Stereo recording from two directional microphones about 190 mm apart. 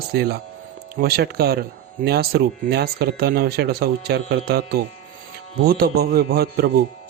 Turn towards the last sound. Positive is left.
turn(degrees=-55)  # may be behind; listen again after turning